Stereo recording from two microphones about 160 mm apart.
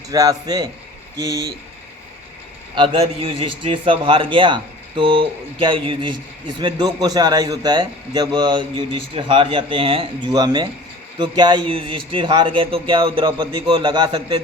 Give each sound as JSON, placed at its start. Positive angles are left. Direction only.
{"t": 0.1, "sound": "a man's voice", "side_deg": -25}
{"t": 2.7, "sound": "a man's voice", "side_deg": -35}